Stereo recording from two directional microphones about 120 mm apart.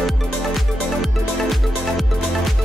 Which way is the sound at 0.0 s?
Centre (ahead or behind).